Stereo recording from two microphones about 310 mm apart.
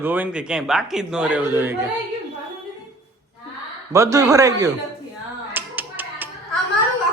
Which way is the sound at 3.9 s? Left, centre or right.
Centre.